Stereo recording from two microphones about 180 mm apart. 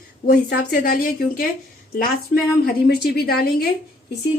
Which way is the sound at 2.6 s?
60° left (ahead or behind).